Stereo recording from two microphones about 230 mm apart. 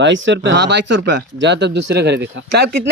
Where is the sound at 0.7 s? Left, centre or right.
Right.